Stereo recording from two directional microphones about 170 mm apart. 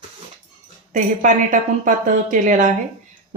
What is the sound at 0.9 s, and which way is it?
A woman's voice, 45° right (ahead or behind).